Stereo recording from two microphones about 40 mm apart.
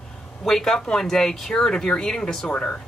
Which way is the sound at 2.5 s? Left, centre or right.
Left.